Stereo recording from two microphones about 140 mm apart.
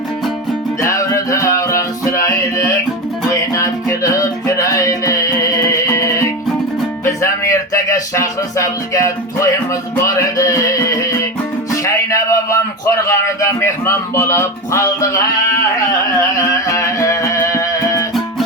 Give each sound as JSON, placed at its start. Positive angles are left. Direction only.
{"t": 0.8, "sound": "music", "side_deg": 20}
{"t": 11.7, "sound": "music", "side_deg": 20}
{"t": 13.1, "sound": "speech", "side_deg": 20}
{"t": 16.4, "sound": "music", "side_deg": 20}